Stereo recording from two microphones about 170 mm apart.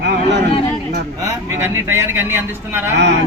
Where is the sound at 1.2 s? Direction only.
15° right (ahead or behind).